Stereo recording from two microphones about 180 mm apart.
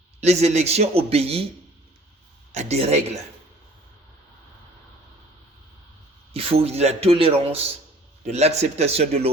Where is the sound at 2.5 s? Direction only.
40° right (ahead or behind).